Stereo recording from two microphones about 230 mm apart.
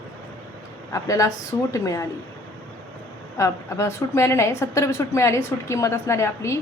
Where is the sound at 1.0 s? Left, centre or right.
Centre.